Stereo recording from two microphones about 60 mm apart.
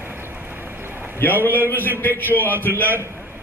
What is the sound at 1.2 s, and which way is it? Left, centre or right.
A man's voice, left.